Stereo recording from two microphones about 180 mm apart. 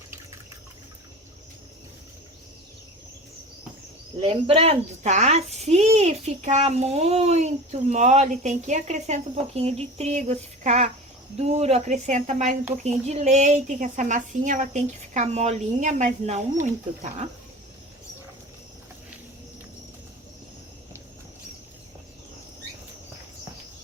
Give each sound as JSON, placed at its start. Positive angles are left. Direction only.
{"t": 4.2, "sound": "a child's voice", "side_deg": -30}